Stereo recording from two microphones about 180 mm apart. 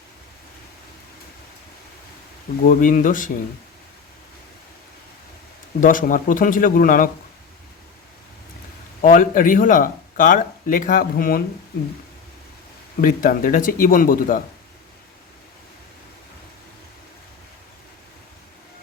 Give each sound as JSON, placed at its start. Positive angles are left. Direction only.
{"t": 2.6, "sound": "speech", "side_deg": 45}
{"t": 5.8, "sound": "speech", "side_deg": 50}
{"t": 9.0, "sound": "speech", "side_deg": 50}
{"t": 13.0, "sound": "speech", "side_deg": 50}